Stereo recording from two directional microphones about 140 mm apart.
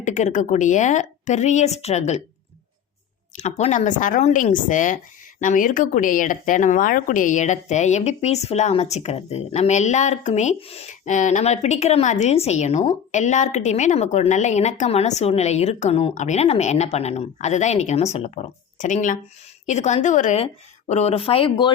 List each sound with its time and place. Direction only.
0.0 s speech: 60° left (ahead or behind)
3.3 s speech: 60° left (ahead or behind)
20.4 s speech: 50° left (ahead or behind)